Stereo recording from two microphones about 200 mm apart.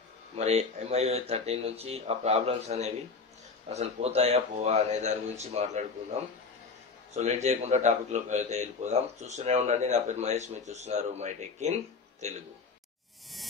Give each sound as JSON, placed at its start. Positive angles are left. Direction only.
{"t": 0.4, "sound": "a man's voice", "side_deg": -35}
{"t": 7.2, "sound": "a man's voice", "side_deg": -35}